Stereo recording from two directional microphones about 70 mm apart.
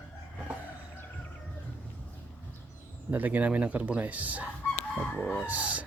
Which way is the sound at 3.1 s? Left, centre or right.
Right.